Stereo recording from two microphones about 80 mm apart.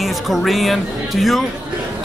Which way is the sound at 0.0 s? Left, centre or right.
Centre.